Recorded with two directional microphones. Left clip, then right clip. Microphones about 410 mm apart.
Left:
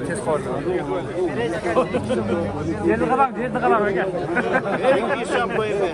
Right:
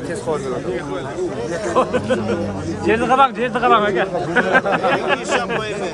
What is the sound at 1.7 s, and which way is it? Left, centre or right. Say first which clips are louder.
Speech: right 5 dB; right.